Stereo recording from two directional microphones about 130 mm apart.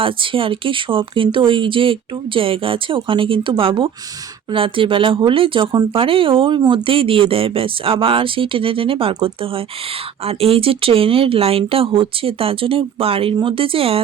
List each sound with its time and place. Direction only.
0.0 s speech: 40° right (ahead or behind)